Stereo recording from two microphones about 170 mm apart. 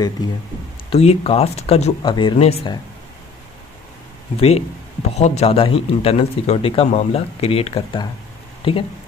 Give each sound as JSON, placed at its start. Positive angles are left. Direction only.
{"t": 0.8, "sound": "a man's voice", "side_deg": 35}
{"t": 4.4, "sound": "a man's voice", "side_deg": 35}